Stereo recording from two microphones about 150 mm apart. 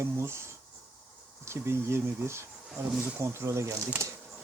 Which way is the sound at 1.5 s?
15° right (ahead or behind).